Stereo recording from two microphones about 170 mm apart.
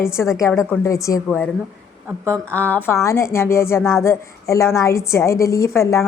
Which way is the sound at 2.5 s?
10° left (ahead or behind).